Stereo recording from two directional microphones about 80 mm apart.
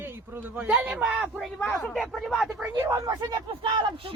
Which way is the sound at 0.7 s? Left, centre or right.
Centre.